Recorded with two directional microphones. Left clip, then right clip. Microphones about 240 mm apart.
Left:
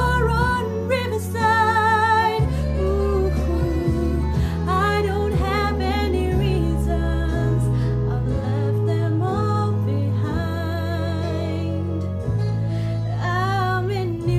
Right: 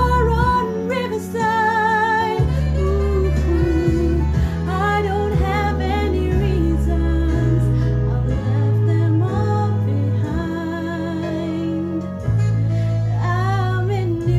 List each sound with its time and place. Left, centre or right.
0.0 s music: centre
4.6 s music: centre